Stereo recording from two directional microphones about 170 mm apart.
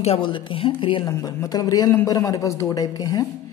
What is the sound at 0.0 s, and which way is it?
A woman's voice, 35° left (ahead or behind).